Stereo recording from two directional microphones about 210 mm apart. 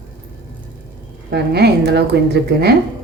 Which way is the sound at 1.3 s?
50° right (ahead or behind).